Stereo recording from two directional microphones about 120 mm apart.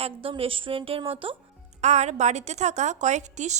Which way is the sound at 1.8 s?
70° right (ahead or behind).